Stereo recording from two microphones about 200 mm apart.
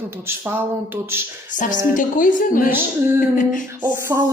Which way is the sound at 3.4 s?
40° left (ahead or behind).